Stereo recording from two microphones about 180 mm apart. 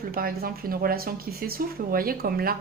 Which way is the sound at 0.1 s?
55° right (ahead or behind).